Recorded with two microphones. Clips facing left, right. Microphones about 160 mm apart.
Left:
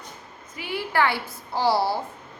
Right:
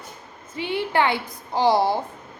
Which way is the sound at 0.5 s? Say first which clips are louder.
Right 3 dB; 25° right (ahead or behind).